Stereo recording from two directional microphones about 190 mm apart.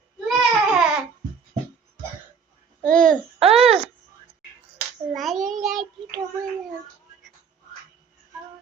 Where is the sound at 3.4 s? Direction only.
30° right (ahead or behind).